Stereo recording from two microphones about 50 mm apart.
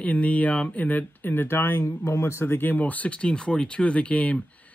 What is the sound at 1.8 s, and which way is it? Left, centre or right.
Speech, left.